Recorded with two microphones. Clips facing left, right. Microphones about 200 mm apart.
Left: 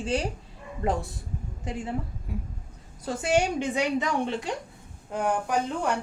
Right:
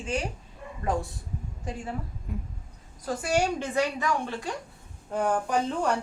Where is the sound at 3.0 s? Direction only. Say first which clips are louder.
Left 2 dB; 25° left (ahead or behind).